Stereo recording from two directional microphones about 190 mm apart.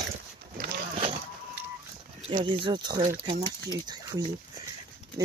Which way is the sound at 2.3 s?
25° right (ahead or behind).